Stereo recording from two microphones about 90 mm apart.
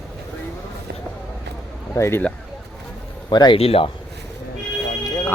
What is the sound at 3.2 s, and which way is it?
Speech, 55° left (ahead or behind).